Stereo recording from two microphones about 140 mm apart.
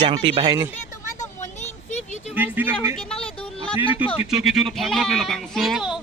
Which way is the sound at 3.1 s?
40° left (ahead or behind).